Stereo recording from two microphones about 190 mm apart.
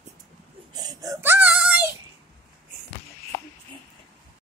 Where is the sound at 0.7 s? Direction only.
20° right (ahead or behind).